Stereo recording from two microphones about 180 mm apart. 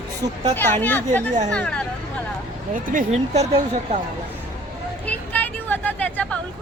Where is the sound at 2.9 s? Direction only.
45° right (ahead or behind).